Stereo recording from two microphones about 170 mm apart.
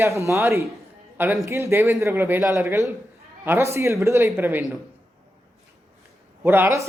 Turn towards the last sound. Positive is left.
turn(degrees=-15)  # may be behind; listen again after turning